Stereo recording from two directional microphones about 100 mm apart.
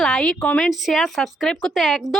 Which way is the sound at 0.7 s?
Centre (ahead or behind).